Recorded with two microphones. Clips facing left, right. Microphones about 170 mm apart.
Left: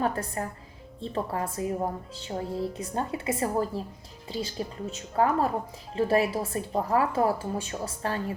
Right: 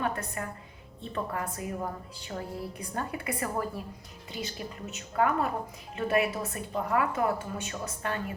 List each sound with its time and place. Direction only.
0.0 s a woman's voice: 35° left (ahead or behind)